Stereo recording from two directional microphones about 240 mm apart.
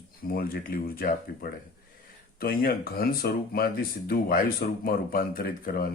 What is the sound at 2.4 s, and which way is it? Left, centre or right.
Speech, left.